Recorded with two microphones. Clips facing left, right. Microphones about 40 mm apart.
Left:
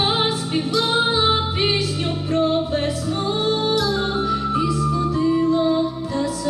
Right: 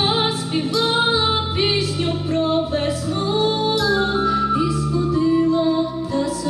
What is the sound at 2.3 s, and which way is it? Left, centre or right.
Music, right.